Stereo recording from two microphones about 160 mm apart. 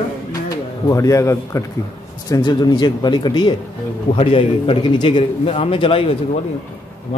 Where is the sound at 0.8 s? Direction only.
20° left (ahead or behind).